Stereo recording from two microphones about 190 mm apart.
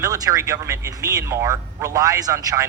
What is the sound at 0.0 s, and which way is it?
A man's voice, 15° right (ahead or behind).